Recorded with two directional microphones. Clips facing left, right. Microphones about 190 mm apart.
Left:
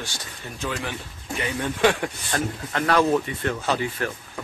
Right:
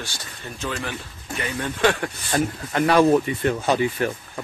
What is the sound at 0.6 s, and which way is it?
Speech, 15° left (ahead or behind).